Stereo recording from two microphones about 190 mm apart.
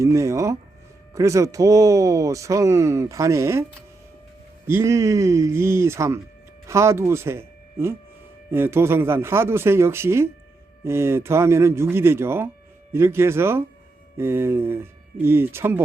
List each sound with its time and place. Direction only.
0.0 s speech: 15° right (ahead or behind)